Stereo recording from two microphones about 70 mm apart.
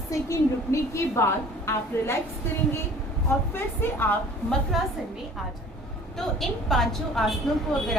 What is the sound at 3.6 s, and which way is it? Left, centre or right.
Speech, left.